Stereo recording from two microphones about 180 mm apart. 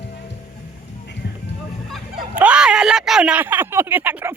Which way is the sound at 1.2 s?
65° left (ahead or behind).